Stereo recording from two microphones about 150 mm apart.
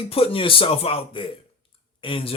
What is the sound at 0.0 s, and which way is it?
A man's voice, 40° left (ahead or behind).